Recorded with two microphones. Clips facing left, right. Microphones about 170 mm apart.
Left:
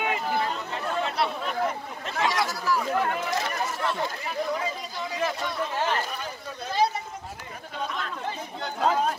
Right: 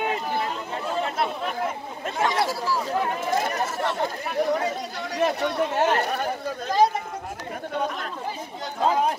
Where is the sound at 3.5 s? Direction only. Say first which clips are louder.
Right 3 dB; 40° right (ahead or behind).